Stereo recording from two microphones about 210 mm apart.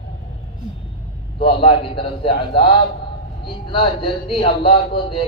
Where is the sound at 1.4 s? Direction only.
25° left (ahead or behind).